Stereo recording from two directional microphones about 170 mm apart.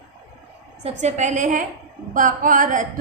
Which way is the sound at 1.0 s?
45° right (ahead or behind).